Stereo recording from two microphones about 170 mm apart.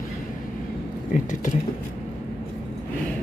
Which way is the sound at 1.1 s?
50° left (ahead or behind).